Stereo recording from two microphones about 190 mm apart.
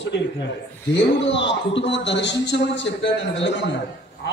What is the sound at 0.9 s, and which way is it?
A man's voice, 70° left (ahead or behind).